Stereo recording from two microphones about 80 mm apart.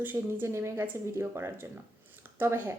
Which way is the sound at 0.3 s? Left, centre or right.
Right.